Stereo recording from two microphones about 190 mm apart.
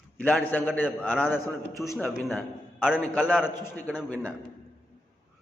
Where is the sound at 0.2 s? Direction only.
10° left (ahead or behind).